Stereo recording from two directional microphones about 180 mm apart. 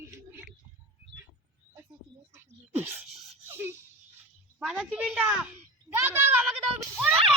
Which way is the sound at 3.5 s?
15° right (ahead or behind).